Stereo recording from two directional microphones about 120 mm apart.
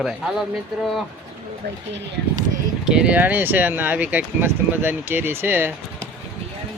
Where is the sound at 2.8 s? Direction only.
5° right (ahead or behind).